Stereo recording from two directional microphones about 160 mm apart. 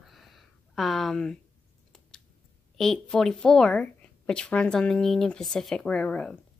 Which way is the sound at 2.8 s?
5° left (ahead or behind).